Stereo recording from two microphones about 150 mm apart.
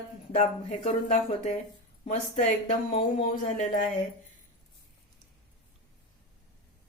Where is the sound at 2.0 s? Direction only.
50° left (ahead or behind).